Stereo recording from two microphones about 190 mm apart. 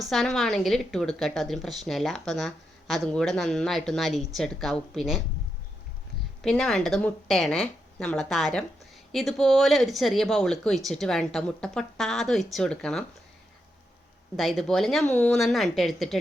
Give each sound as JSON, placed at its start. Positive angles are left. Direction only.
{"t": 0.0, "sound": "a woman's voice", "side_deg": 0}
{"t": 6.4, "sound": "a woman's voice", "side_deg": 0}
{"t": 14.3, "sound": "a woman's voice", "side_deg": 0}